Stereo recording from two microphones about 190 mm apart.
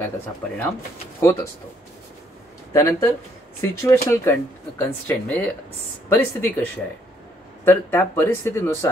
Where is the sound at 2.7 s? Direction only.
15° left (ahead or behind).